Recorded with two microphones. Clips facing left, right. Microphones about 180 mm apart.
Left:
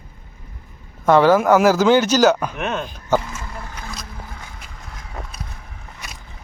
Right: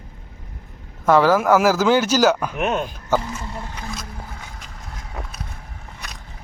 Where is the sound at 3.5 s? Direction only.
25° right (ahead or behind).